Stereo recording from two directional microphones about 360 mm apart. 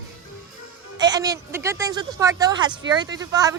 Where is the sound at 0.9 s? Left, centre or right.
Centre.